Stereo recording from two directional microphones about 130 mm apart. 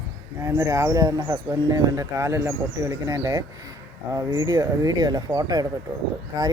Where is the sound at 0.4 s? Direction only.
25° right (ahead or behind).